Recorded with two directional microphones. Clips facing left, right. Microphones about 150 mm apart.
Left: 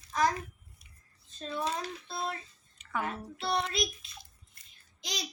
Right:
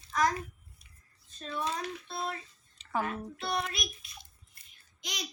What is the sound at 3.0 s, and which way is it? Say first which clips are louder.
A child's voice: left 1 dB; 30° left (ahead or behind).